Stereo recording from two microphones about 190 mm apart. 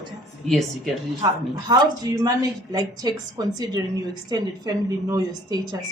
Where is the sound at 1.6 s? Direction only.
20° right (ahead or behind).